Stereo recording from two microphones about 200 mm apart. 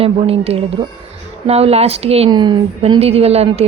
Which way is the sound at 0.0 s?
30° right (ahead or behind).